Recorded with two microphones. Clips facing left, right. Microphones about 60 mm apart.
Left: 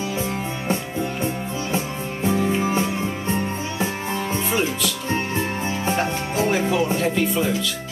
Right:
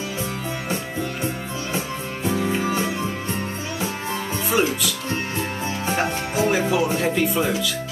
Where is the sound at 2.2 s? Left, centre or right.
Left.